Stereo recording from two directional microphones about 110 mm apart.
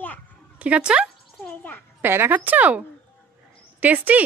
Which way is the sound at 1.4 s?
15° left (ahead or behind).